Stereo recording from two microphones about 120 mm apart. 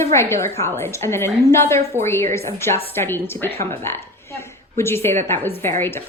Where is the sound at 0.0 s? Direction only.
20° left (ahead or behind).